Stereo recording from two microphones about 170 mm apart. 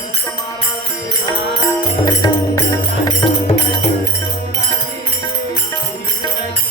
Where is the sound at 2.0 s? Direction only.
20° left (ahead or behind).